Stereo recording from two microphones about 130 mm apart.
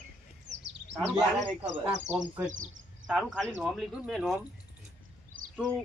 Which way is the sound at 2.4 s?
80° right.